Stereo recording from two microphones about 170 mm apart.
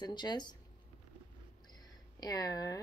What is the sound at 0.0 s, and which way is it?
Speech, 25° left (ahead or behind).